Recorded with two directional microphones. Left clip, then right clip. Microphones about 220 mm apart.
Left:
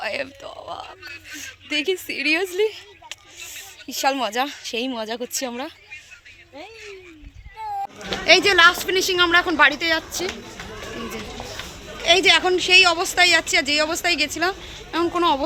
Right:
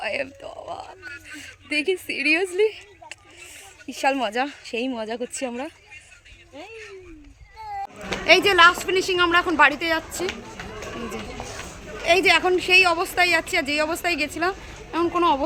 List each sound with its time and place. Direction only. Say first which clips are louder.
0.0 s speech: even; centre (ahead or behind)
2.6 s a sound: right 1 dB; centre (ahead or behind)
3.8 s speech: left 1 dB; 5° right (ahead or behind)
6.6 s speech: left 1 dB; 20° right (ahead or behind)
7.6 s a sound: left 4 dB; 30° right (ahead or behind)
8.2 s speech: left 1 dB; centre (ahead or behind)
12.0 s speech: left 2 dB; 5° left (ahead or behind)